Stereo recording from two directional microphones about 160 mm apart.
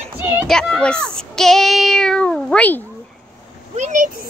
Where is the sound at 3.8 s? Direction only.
50° right (ahead or behind).